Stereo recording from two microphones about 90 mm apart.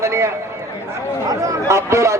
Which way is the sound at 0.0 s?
30° right (ahead or behind).